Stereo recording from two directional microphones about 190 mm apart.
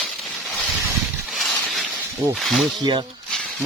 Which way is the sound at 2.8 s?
25° right (ahead or behind).